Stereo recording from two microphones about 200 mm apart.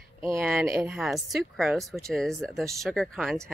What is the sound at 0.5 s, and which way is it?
Speech, 5° right (ahead or behind).